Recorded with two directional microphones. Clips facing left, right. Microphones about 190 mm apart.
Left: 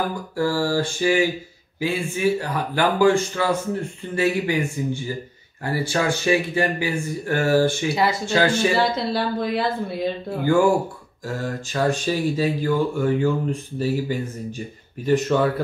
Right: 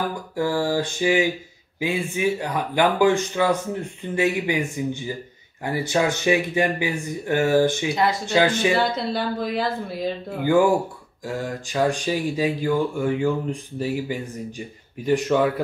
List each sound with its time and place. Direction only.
0.4 s speech: 20° right (ahead or behind)
7.9 s speech: 5° left (ahead or behind)
8.3 s speech: 20° right (ahead or behind)
8.7 s speech: centre (ahead or behind)
11.2 s speech: 15° right (ahead or behind)